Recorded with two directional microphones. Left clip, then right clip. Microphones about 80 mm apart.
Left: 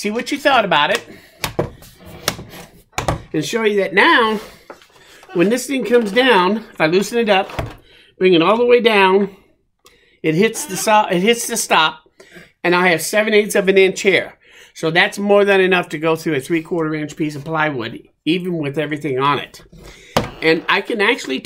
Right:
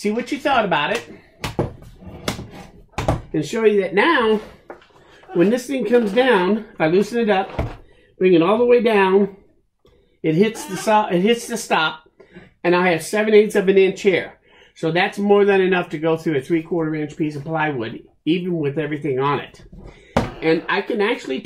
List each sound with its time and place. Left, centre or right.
0.0 s speech: left
3.3 s speech: left